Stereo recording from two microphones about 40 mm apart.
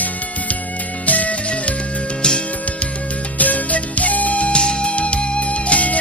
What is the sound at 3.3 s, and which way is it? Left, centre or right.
Music, left.